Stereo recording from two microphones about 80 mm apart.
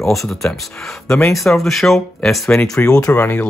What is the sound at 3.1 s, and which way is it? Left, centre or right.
Speech, left.